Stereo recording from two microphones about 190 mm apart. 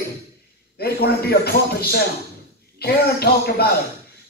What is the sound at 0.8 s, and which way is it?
A man's voice, 55° left (ahead or behind).